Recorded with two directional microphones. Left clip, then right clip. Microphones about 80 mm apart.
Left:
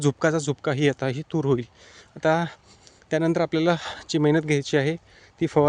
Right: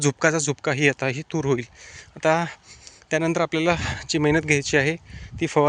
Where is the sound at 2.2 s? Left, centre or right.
Left.